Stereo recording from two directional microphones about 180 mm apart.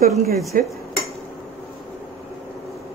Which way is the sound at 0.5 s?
50° right (ahead or behind).